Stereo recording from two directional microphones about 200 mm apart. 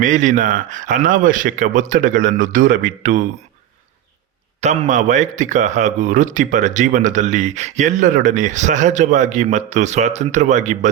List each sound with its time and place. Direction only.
0.0 s a man's voice: 40° right (ahead or behind)
4.6 s a man's voice: 35° right (ahead or behind)